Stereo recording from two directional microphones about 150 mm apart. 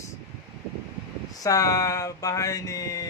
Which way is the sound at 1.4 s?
25° left (ahead or behind).